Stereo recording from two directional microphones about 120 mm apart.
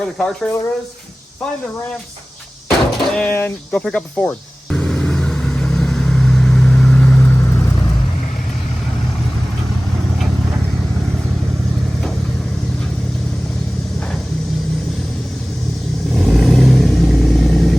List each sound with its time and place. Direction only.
0.0 s speech: 5° left (ahead or behind)
2.6 s a sound: 5° left (ahead or behind)
3.3 s speech: 15° left (ahead or behind)
3.8 s vehicle: 10° left (ahead or behind)
16.1 s vehicle: centre (ahead or behind)